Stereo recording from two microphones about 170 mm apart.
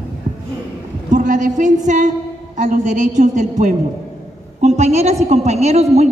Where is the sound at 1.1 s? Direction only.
45° right (ahead or behind).